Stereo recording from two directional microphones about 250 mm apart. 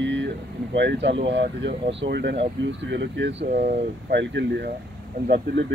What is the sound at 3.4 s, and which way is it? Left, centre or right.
Speech, right.